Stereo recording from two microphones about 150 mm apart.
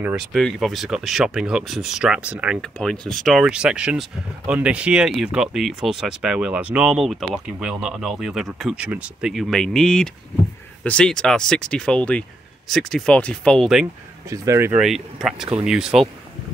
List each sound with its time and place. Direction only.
0.0 s speech: 5° right (ahead or behind)
2.8 s speech: 5° left (ahead or behind)
14.3 s speech: 20° right (ahead or behind)
14.8 s speech: centre (ahead or behind)